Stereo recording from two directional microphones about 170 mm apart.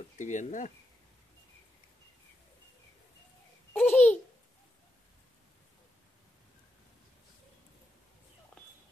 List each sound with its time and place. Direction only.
0.2 s speech: 45° left (ahead or behind)
3.7 s babbling: 10° left (ahead or behind)